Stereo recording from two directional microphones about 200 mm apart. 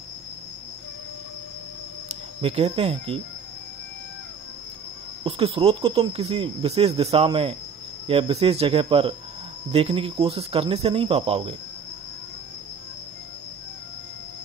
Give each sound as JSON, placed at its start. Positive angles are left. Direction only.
{"t": 2.4, "sound": "speech", "side_deg": -30}
{"t": 5.2, "sound": "speech", "side_deg": -30}